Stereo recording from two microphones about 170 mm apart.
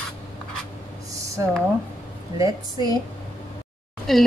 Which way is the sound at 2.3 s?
25° right (ahead or behind).